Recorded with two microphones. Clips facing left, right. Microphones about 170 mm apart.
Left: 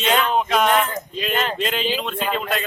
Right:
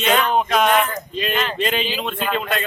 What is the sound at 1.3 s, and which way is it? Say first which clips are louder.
Speech: left 2 dB; 40° left (ahead or behind).